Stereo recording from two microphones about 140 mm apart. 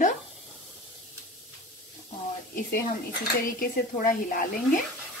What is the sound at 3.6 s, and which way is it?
Speech, 80° left.